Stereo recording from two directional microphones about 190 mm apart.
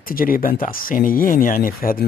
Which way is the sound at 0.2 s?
50° left (ahead or behind).